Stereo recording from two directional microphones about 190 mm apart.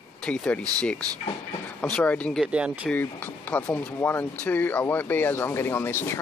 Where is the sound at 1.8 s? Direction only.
5° left (ahead or behind).